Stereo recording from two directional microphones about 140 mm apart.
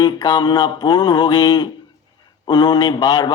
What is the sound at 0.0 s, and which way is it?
A man's voice, 30° left (ahead or behind).